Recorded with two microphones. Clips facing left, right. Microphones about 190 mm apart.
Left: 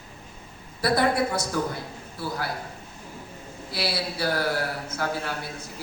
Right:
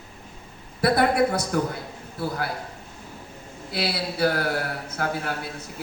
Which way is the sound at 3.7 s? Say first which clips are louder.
Right 2 dB; 55° right (ahead or behind).